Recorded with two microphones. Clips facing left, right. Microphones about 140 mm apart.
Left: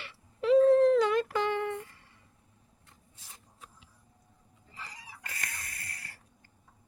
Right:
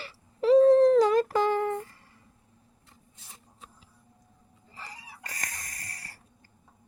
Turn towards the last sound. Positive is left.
turn(degrees=-40)  # may be behind; listen again after turning